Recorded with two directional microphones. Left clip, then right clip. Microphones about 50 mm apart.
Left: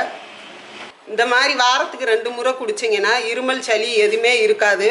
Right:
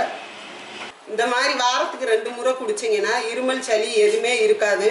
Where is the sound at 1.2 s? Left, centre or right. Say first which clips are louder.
Left 5 dB; left.